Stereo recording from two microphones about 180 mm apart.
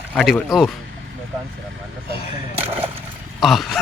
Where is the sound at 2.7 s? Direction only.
30° right (ahead or behind).